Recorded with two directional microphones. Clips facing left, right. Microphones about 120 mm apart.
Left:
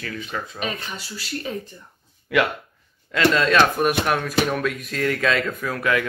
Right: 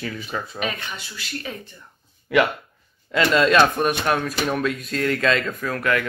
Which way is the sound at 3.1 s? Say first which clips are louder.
Right 1 dB; 5° right (ahead or behind).